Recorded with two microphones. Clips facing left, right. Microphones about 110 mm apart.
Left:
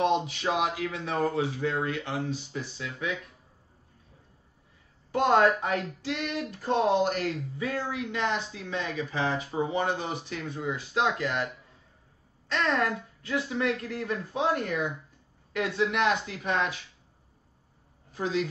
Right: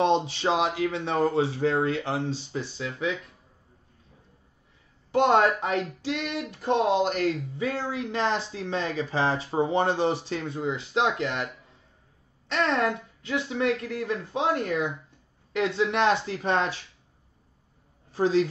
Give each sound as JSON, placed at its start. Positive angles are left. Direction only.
{"t": 0.0, "sound": "speech", "side_deg": -30}
{"t": 5.6, "sound": "speech", "side_deg": -25}
{"t": 12.6, "sound": "speech", "side_deg": -25}
{"t": 18.1, "sound": "a woman's voice", "side_deg": -35}